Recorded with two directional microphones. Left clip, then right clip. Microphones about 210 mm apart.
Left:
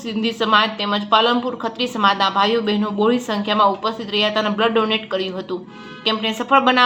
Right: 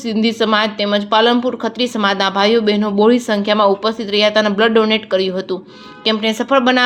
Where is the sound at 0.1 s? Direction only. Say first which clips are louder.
Right 2 dB; 40° right (ahead or behind).